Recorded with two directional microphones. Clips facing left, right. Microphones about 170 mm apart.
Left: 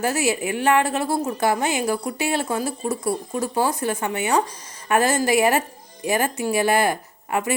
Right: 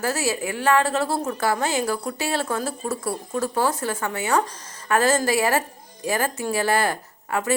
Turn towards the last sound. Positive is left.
turn(degrees=15)  # may be behind; listen again after turning